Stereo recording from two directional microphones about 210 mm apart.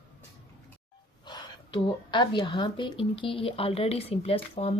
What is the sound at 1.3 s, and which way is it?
A woman's voice, 20° left (ahead or behind).